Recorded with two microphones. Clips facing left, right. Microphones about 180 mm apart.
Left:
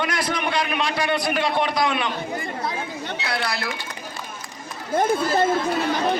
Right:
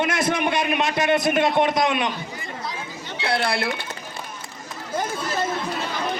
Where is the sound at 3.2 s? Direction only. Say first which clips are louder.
Right 6 dB; 30° right (ahead or behind).